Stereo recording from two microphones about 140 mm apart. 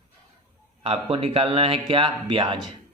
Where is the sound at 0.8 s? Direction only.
45° right (ahead or behind).